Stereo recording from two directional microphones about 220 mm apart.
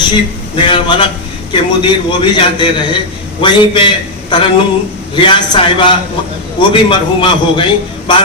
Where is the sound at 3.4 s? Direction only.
20° left (ahead or behind).